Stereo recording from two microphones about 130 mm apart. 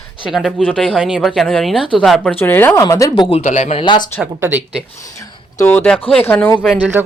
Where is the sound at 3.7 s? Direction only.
40° left (ahead or behind).